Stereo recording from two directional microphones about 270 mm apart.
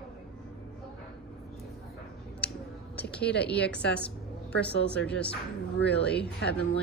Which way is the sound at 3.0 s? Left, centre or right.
Centre.